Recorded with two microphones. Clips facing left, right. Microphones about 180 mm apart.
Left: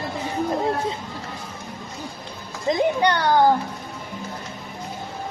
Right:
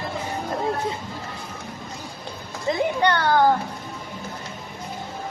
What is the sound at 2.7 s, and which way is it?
Speech, 15° left (ahead or behind).